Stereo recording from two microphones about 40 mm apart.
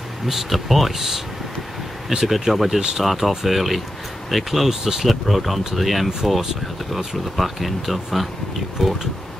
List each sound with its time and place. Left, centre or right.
0.3 s speech: centre
2.2 s speech: centre